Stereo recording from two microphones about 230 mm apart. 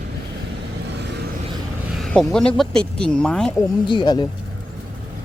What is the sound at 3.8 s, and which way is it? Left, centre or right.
Speech, centre.